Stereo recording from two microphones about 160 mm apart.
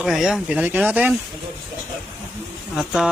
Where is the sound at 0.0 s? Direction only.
Centre (ahead or behind).